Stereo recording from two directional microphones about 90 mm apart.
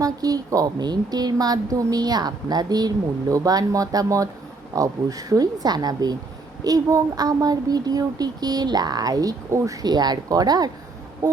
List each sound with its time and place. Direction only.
0.0 s a woman's voice: 40° right (ahead or behind)